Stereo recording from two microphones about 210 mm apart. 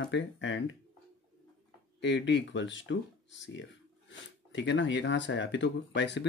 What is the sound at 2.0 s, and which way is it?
Speech, 60° left (ahead or behind).